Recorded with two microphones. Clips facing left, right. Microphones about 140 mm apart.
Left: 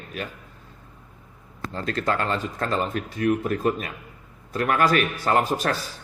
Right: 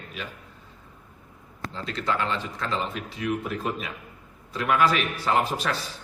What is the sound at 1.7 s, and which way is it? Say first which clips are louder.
Speech: left 3 dB; 50° left (ahead or behind).